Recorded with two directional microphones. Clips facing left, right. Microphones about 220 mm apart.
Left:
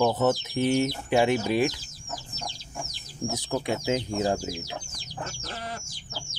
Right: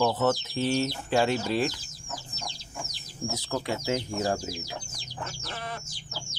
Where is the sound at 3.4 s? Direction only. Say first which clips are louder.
Left 2 dB; 15° left (ahead or behind).